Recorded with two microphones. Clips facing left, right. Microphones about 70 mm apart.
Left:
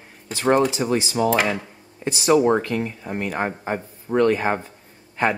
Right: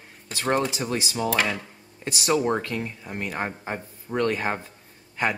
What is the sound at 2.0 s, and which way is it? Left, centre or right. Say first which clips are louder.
A man's voice: left 6 dB; left.